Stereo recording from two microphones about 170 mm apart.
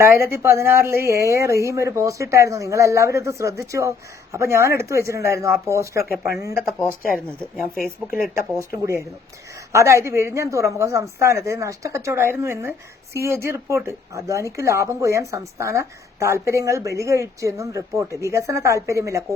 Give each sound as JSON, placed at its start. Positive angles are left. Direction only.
{"t": 0.3, "sound": "a woman's voice", "side_deg": -15}
{"t": 7.5, "sound": "speech", "side_deg": 0}
{"t": 8.4, "sound": "a woman's voice", "side_deg": -15}